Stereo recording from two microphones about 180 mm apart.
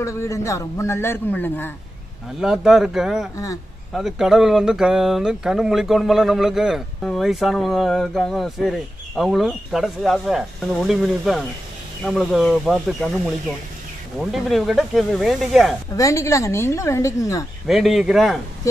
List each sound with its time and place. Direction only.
0.0 s speech: 15° left (ahead or behind)
2.4 s speech: centre (ahead or behind)
14.1 s speech: centre (ahead or behind)
16.0 s speech: 15° left (ahead or behind)
17.6 s speech: centre (ahead or behind)